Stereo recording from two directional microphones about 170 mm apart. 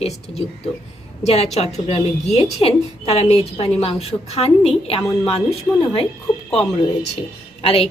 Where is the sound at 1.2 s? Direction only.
40° left (ahead or behind).